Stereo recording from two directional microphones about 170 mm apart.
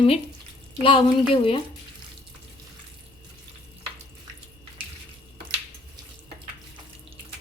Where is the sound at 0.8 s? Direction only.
35° left (ahead or behind).